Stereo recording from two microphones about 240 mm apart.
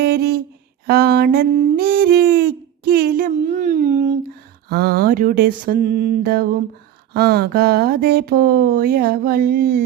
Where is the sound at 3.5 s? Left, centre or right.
Right.